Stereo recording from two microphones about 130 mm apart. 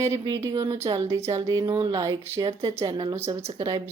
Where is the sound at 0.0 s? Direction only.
25° right (ahead or behind).